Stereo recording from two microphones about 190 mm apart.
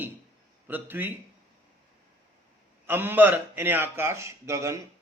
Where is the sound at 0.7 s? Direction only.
10° right (ahead or behind).